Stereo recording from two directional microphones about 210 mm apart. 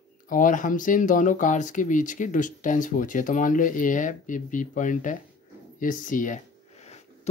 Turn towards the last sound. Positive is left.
turn(degrees=30)  # may be behind; listen again after turning